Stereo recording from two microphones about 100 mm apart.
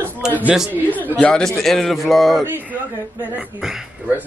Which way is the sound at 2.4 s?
20° right (ahead or behind).